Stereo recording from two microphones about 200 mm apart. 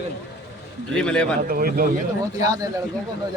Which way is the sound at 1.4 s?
45° right (ahead or behind).